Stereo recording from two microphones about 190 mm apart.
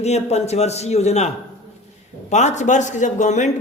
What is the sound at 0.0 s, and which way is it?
Speech, 35° left (ahead or behind).